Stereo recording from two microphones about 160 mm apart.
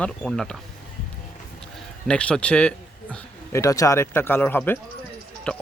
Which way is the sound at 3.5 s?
20° left (ahead or behind).